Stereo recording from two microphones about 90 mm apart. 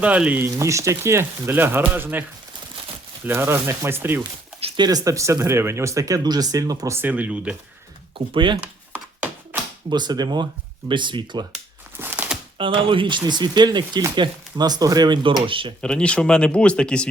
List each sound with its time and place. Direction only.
0.0 s speech: 15° right (ahead or behind)
3.2 s speech: 30° right (ahead or behind)
4.8 s speech: 45° right (ahead or behind)
7.0 s speech: 15° right (ahead or behind)
8.3 s speech: 65° right (ahead or behind)
8.6 s a sound: 20° right (ahead or behind)
9.9 s speech: 50° right (ahead or behind)
11.9 s a sound: 20° right (ahead or behind)
12.5 s speech: 70° right (ahead or behind); by 15.4 s 55° right (ahead or behind)
15.4 s speech: 75° right (ahead or behind)
15.8 s speech: 10° left (ahead or behind)